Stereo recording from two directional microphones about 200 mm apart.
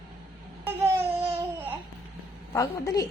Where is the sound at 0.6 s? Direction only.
10° right (ahead or behind).